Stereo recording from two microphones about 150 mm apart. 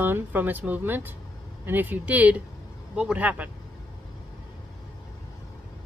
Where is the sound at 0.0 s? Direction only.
15° right (ahead or behind).